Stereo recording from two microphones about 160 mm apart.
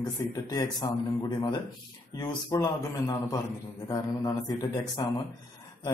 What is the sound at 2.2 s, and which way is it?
Speech, 25° left (ahead or behind).